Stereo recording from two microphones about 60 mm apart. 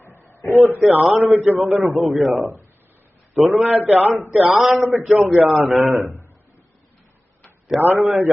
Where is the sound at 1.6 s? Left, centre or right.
Centre.